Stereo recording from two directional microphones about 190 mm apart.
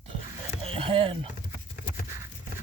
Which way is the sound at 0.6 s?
30° right (ahead or behind).